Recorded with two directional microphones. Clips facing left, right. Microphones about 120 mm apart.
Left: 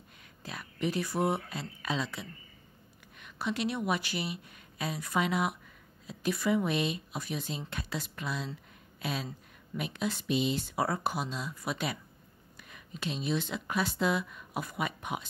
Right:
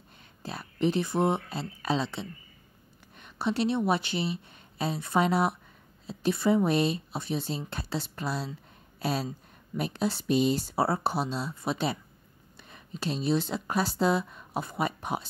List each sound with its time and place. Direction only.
0.4 s speech: 30° right (ahead or behind)